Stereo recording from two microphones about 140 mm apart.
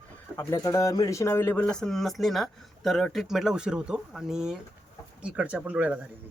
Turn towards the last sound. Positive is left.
turn(degrees=-10)  # may be behind; listen again after turning